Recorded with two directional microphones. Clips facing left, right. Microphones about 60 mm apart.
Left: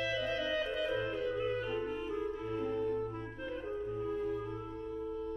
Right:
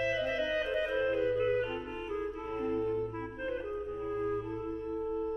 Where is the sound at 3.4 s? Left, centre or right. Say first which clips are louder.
Right 2 dB; right.